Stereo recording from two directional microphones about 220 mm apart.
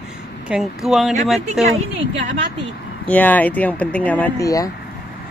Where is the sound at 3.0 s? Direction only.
5° left (ahead or behind).